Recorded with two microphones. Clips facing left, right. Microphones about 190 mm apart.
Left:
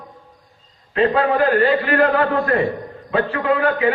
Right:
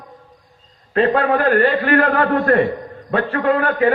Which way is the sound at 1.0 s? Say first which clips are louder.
Even; 50° right (ahead or behind).